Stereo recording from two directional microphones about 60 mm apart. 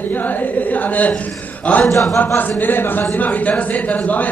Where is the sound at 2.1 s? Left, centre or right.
Left.